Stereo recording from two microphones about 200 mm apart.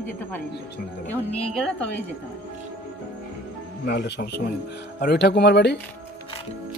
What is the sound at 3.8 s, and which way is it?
Speech, 55° left (ahead or behind).